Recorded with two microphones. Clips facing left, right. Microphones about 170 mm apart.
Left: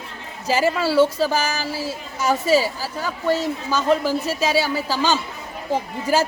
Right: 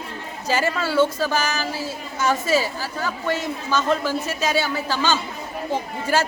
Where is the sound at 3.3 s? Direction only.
35° left (ahead or behind).